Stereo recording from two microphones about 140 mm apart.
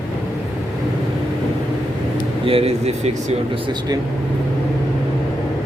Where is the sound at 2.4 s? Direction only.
45° right (ahead or behind).